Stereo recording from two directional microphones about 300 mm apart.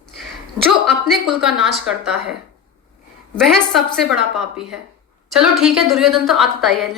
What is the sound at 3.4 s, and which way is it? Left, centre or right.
Speech, centre.